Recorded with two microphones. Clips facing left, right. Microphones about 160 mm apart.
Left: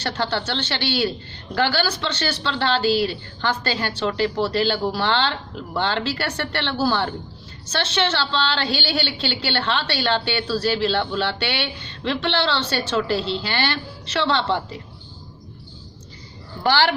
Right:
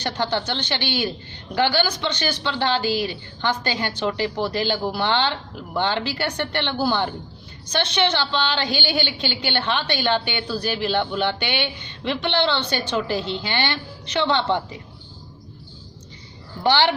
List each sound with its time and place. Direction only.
0.0 s a woman's voice: 15° right (ahead or behind)
16.6 s speech: 20° right (ahead or behind)